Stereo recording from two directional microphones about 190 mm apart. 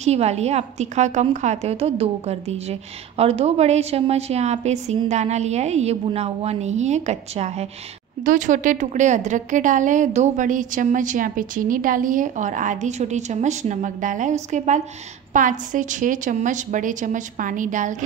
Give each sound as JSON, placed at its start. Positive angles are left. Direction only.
{"t": 0.0, "sound": "a woman's voice", "side_deg": -35}